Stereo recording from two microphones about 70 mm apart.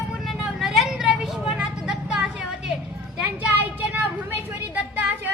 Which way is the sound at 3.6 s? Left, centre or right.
Right.